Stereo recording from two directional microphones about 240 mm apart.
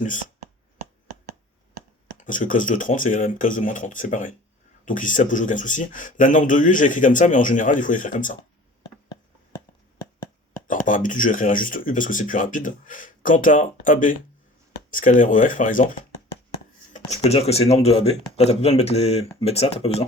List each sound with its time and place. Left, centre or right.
2.1 s speech: left
10.7 s speech: left
17.2 s speech: left